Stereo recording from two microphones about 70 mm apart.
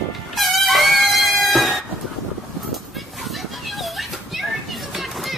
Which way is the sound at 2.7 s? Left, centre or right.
Centre.